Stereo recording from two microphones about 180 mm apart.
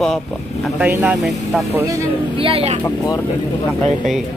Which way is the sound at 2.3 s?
30° right (ahead or behind).